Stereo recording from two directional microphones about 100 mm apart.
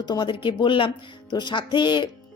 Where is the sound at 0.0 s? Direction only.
50° left (ahead or behind).